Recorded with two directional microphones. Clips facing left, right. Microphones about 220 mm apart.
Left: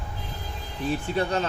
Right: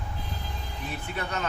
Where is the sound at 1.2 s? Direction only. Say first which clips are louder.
Left 7 dB; 30° left (ahead or behind).